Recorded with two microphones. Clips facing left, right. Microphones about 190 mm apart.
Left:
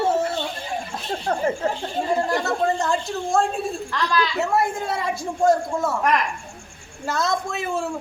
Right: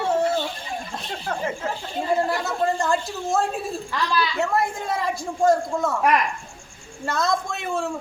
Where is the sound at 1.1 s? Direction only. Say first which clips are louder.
Left 5 dB; 35° left (ahead or behind).